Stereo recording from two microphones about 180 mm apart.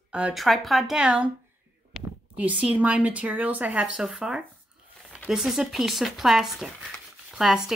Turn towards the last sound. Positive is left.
turn(degrees=0)  # may be behind; listen again after turning